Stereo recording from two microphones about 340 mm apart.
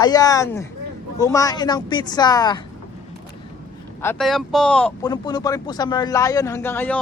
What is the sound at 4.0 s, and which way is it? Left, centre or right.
Speech, centre.